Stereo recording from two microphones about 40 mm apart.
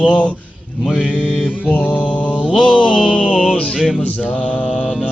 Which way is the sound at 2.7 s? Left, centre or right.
Right.